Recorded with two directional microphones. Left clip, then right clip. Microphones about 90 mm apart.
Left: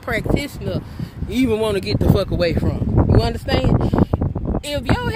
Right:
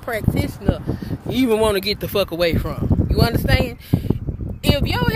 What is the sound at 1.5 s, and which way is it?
Speech, centre (ahead or behind).